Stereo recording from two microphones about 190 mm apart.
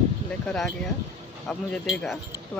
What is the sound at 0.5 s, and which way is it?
Speech, 5° left (ahead or behind).